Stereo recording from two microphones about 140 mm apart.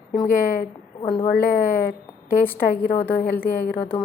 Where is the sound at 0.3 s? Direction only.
90° left.